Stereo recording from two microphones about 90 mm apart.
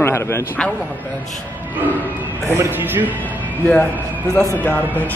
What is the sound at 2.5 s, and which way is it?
Speech, 25° right (ahead or behind).